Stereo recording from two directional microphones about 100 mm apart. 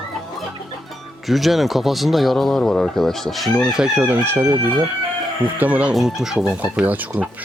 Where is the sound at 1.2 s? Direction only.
Centre (ahead or behind).